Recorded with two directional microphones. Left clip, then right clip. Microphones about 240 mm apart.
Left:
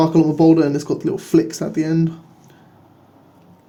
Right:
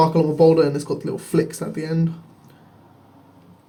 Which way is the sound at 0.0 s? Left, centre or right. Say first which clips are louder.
Left 1 dB; left.